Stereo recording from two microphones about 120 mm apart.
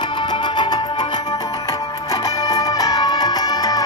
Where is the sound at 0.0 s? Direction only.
40° left (ahead or behind).